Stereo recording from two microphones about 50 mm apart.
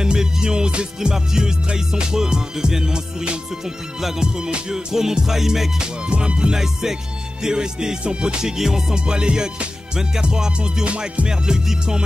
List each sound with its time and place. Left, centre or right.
0.0 s music: centre